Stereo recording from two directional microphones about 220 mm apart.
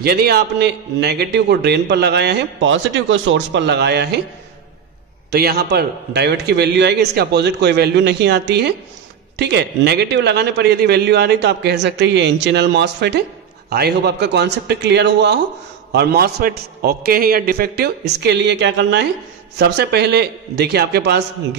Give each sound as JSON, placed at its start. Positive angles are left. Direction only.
{"t": 0.0, "sound": "a man's voice", "side_deg": -45}
{"t": 5.3, "sound": "a man's voice", "side_deg": -45}